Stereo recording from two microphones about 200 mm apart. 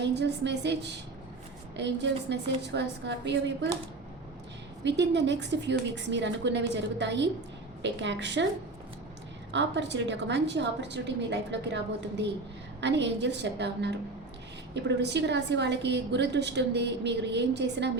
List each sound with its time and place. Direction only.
0.0 s a woman's voice: 60° right (ahead or behind)
4.8 s a woman's voice: 60° right (ahead or behind)
9.5 s a woman's voice: 60° right (ahead or behind)